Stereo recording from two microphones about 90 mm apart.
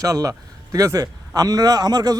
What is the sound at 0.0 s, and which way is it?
A man's voice, 40° right (ahead or behind).